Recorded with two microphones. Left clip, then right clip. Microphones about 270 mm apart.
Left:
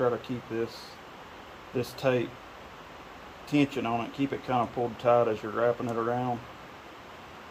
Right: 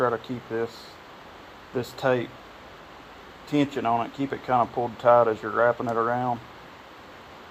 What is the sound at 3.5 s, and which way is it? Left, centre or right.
Speech, centre.